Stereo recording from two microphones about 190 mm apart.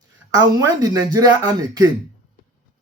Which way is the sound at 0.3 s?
20° right (ahead or behind).